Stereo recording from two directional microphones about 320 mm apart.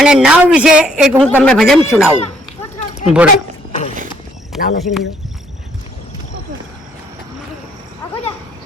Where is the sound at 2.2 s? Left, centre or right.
Centre.